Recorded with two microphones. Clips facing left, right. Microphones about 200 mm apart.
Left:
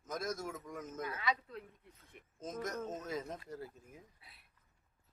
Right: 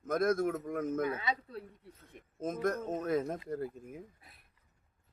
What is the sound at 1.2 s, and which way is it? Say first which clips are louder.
Speech: right 1 dB; 30° right (ahead or behind).